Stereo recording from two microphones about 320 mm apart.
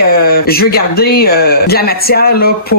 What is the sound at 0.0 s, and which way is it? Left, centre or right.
Speech, left.